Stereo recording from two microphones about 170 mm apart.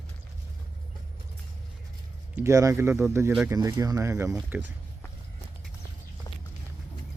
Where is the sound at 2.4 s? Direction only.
20° right (ahead or behind).